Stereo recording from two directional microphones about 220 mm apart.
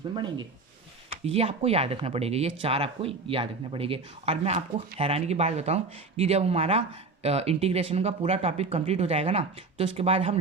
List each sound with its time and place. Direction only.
1.1 s speech: 25° right (ahead or behind)